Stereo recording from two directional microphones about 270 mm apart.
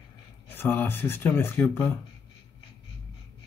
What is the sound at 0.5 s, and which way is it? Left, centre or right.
Speech, centre.